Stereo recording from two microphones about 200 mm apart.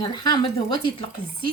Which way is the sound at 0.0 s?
20° left (ahead or behind).